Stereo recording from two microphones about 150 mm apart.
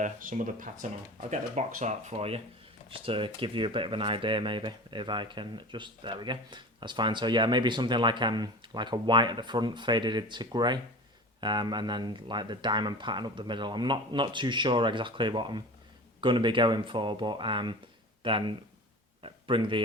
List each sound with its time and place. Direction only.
0.0 s speech: 60° right (ahead or behind); by 19.8 s 35° right (ahead or behind)